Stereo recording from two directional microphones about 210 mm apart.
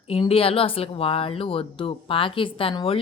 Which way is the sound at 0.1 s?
25° left (ahead or behind).